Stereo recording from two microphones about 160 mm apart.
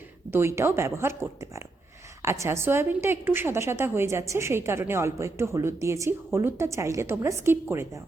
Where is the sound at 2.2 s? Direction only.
15° right (ahead or behind).